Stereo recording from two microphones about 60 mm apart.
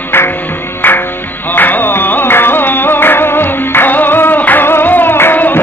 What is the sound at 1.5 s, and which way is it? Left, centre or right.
Music, left.